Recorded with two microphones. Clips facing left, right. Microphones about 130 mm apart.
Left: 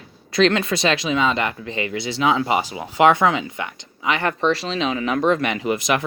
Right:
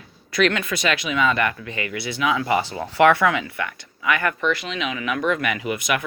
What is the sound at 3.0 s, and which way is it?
Speech, 20° left (ahead or behind).